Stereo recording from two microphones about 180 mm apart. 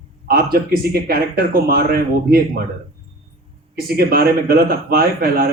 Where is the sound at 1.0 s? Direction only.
55° right (ahead or behind).